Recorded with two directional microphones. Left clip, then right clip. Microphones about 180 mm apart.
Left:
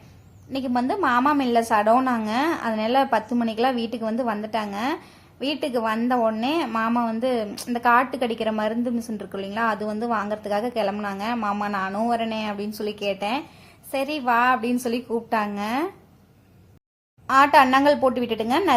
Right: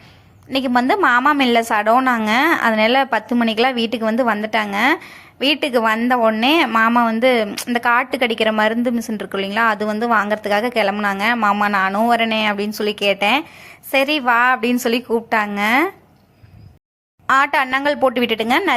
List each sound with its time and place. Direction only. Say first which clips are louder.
0.5 s a woman's voice: right 8 dB; 20° right (ahead or behind)
17.2 s a woman's voice: even; 20° right (ahead or behind)